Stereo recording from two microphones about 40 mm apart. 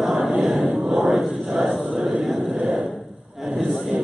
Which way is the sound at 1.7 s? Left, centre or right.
Centre.